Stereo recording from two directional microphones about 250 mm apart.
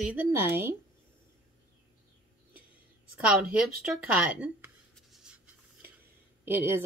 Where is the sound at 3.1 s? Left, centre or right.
Centre.